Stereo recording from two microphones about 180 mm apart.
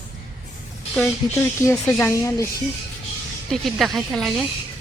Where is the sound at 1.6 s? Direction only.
15° left (ahead or behind).